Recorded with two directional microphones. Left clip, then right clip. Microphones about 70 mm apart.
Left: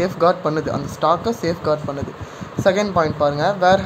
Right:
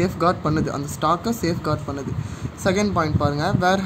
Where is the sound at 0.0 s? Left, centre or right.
Right.